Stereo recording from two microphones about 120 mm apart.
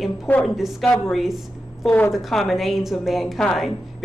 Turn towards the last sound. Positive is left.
turn(degrees=0)  # may be behind; listen again after turning